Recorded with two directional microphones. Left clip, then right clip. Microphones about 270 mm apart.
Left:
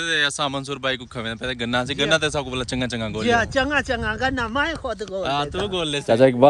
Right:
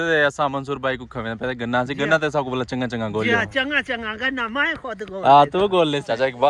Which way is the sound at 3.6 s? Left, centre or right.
Centre.